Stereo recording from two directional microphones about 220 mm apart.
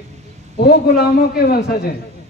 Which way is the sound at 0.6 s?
45° left (ahead or behind).